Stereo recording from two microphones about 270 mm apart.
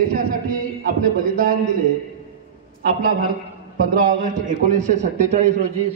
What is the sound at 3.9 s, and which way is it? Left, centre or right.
A man's voice, right.